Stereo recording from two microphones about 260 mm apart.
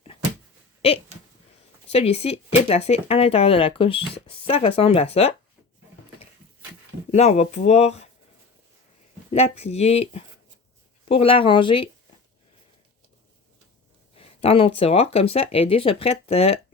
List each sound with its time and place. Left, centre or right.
1.9 s speech: left
7.1 s speech: left
9.3 s speech: left
14.2 s speech: left